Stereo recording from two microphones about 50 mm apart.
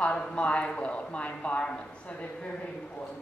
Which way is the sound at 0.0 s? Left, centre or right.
Left.